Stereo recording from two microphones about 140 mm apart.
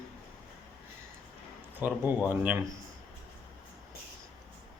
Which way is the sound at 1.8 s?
15° right (ahead or behind).